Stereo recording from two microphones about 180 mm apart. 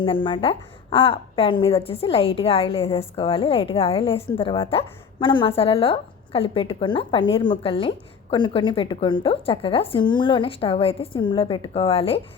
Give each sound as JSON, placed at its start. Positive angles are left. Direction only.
{"t": 0.0, "sound": "a woman's voice", "side_deg": 25}